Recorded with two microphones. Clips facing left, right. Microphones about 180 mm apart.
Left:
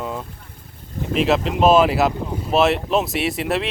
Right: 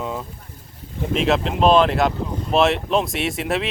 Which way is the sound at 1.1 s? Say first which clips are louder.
Left 1 dB; centre (ahead or behind).